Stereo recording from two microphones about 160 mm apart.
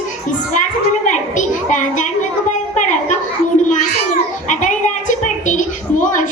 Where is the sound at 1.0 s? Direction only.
50° left (ahead or behind).